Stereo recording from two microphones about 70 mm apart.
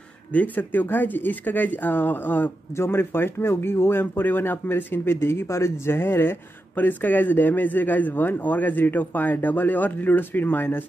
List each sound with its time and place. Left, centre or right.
0.3 s a man's voice: left